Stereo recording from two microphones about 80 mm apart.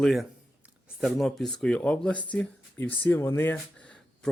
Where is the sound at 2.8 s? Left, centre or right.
Left.